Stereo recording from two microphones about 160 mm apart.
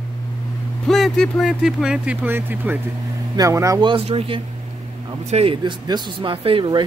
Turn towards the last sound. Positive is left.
turn(degrees=-30)  # may be behind; listen again after turning